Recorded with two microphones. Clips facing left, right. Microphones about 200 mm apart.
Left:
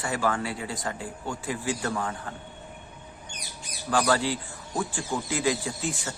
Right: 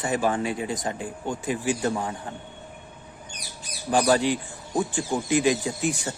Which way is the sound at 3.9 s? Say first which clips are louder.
Right 4 dB; 20° right (ahead or behind).